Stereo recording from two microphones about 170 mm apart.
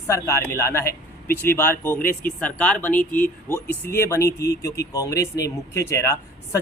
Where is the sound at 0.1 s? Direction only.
15° left (ahead or behind).